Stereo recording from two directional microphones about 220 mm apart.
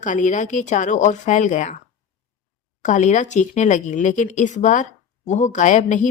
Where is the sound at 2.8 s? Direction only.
35° left (ahead or behind).